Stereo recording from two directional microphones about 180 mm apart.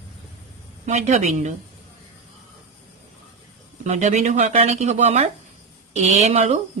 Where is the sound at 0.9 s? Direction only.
40° right (ahead or behind).